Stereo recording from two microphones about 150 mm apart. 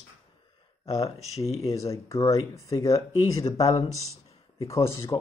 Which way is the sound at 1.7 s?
20° left (ahead or behind).